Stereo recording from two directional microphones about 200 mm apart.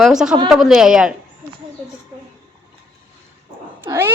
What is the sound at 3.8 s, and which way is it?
Cat, 10° right (ahead or behind).